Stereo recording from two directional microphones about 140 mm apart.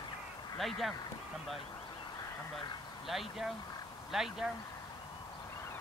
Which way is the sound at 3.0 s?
Centre (ahead or behind).